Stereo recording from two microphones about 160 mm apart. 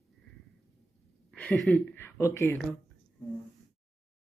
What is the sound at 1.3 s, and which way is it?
A woman's voice, 10° left (ahead or behind).